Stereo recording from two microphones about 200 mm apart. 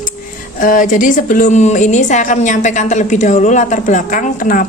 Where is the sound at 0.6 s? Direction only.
40° left (ahead or behind).